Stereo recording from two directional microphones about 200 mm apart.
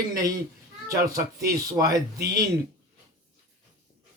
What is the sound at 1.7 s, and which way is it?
Speech, 15° right (ahead or behind).